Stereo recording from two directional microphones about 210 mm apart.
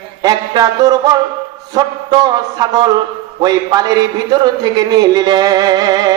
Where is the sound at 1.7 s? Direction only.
20° right (ahead or behind).